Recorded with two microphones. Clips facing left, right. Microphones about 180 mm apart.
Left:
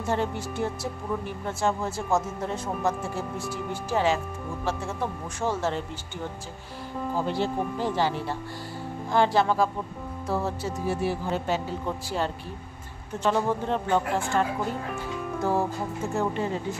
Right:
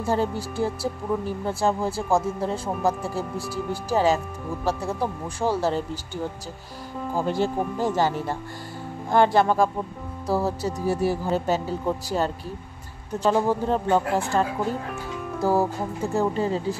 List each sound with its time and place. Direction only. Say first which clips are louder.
0.0 s speech: right 3 dB; 35° right (ahead or behind)
7.2 s speech: right 3 dB; 45° right (ahead or behind)
10.2 s speech: right 4 dB; 35° right (ahead or behind)
15.4 s speech: right 4 dB; 35° right (ahead or behind)